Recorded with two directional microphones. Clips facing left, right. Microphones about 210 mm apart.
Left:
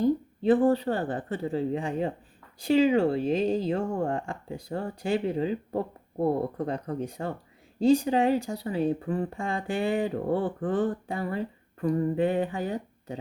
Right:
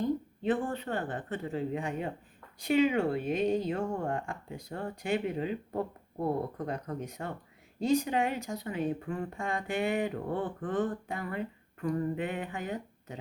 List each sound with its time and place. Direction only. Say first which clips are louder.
0.0 s speech: left 6 dB; 35° left (ahead or behind)